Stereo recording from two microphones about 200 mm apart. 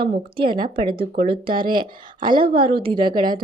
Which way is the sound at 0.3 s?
25° right (ahead or behind).